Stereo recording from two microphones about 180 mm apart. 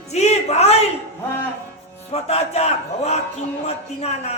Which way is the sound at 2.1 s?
35° left (ahead or behind).